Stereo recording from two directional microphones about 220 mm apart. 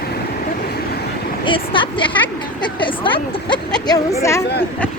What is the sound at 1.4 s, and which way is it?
A woman's voice, 20° left (ahead or behind).